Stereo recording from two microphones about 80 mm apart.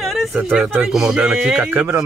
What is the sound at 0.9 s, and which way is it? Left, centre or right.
Speech, centre.